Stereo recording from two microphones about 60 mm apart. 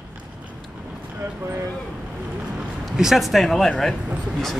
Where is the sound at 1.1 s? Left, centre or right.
Right.